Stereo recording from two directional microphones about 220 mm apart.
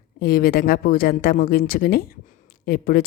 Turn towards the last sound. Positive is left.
turn(degrees=40)  # may be behind; listen again after turning